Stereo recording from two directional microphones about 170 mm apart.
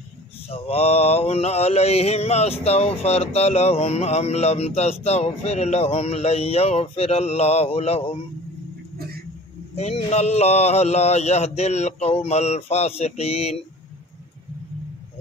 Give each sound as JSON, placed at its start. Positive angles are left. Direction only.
{"t": 0.7, "sound": "mantra", "side_deg": 35}
{"t": 9.8, "sound": "mantra", "side_deg": 40}